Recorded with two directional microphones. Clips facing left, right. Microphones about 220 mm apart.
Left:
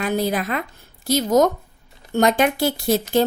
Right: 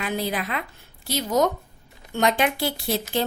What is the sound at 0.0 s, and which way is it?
A woman's voice, 45° left (ahead or behind).